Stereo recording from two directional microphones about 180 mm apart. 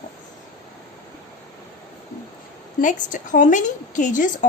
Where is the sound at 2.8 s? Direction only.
45° left (ahead or behind).